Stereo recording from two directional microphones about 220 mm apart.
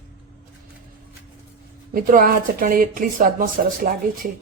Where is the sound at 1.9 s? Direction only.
40° right (ahead or behind).